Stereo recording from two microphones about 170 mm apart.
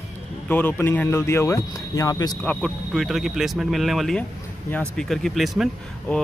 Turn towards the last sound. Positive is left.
turn(degrees=0)  # may be behind; listen again after turning